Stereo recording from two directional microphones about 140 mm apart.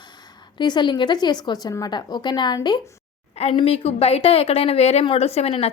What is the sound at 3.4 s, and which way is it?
A woman's voice, 45° left (ahead or behind).